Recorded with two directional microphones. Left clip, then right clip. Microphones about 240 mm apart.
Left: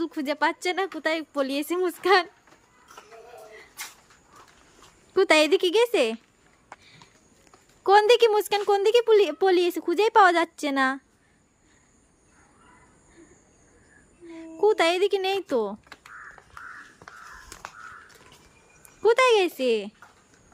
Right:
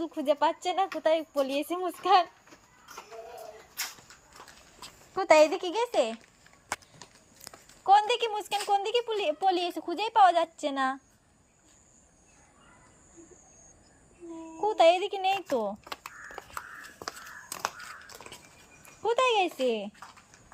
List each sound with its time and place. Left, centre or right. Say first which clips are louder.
0.0 s speech: left 1 dB; centre
5.1 s speech: left 2 dB; centre
7.9 s speech: left 6 dB; centre
14.6 s speech: left 2 dB; centre
19.0 s speech: left 6 dB; centre